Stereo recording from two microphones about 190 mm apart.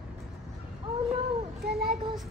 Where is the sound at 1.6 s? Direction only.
60° right (ahead or behind).